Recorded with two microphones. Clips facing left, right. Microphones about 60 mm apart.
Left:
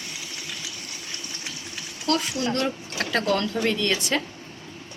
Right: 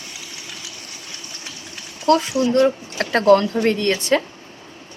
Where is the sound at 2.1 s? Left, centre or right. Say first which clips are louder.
Right 8 dB; right.